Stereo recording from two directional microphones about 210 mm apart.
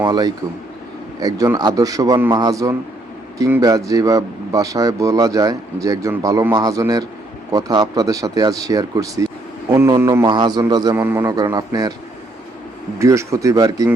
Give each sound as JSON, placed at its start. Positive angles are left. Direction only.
{"t": 0.0, "sound": "speech", "side_deg": -20}
{"t": 13.0, "sound": "speech", "side_deg": -15}